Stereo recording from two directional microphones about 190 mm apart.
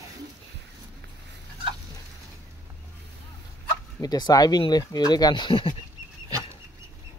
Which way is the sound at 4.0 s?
20° left (ahead or behind).